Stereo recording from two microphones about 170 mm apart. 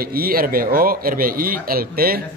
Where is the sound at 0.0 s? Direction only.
60° right (ahead or behind).